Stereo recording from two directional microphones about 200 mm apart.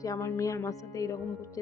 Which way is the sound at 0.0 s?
15° left (ahead or behind).